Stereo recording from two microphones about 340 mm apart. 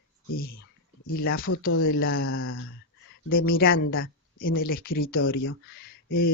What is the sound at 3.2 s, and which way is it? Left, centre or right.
Speech, left.